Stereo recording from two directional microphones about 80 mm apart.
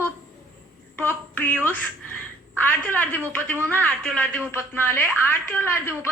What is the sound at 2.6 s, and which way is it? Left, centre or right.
A woman's voice, left.